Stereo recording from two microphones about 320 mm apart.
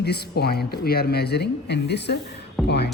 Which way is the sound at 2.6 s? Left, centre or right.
Centre.